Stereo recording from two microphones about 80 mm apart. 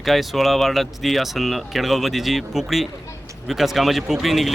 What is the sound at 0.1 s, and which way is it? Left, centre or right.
Speech, centre.